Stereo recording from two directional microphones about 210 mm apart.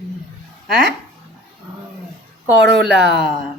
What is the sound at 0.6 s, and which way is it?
Speech, 45° right (ahead or behind).